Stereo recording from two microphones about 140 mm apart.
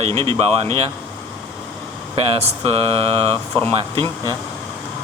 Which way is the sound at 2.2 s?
45° right (ahead or behind).